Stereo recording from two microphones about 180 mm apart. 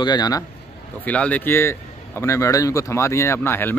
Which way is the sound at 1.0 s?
10° left (ahead or behind).